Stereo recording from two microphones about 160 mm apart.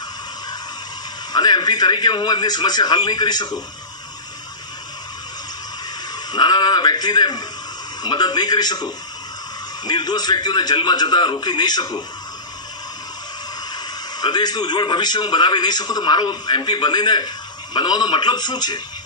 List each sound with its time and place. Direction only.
1.3 s a man's voice: 25° left (ahead or behind)
6.3 s a sound: 25° left (ahead or behind)
8.0 s a man's voice: 25° left (ahead or behind)
14.2 s a man's voice: 25° left (ahead or behind)